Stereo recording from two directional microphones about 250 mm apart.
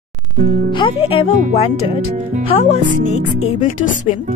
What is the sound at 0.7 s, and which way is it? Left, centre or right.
Speech, centre.